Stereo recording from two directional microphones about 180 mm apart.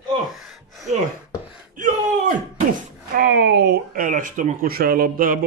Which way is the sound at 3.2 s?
55° right (ahead or behind).